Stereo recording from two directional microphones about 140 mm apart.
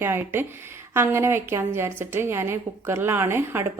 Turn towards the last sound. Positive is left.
turn(degrees=-15)  # may be behind; listen again after turning